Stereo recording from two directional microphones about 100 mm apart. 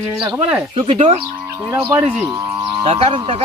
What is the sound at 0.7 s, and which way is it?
Speech, 90° right.